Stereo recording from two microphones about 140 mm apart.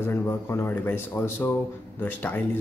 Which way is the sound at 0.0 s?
15° left (ahead or behind).